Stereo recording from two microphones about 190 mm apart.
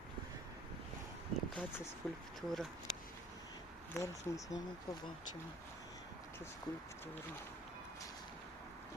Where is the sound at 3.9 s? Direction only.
15° left (ahead or behind).